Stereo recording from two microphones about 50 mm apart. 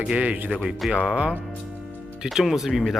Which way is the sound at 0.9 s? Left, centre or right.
Centre.